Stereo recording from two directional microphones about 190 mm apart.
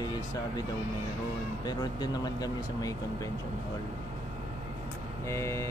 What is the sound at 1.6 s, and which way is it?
Speech, 20° left (ahead or behind).